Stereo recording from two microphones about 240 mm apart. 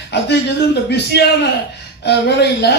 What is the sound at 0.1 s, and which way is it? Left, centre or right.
Speech, left.